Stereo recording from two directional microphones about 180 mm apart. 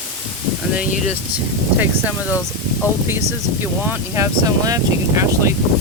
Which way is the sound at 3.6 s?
15° right (ahead or behind).